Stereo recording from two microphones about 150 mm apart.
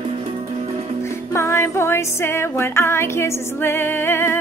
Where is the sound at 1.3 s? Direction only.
20° left (ahead or behind).